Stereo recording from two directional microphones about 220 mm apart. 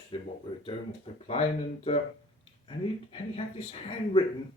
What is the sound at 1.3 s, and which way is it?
Speech, 30° left (ahead or behind).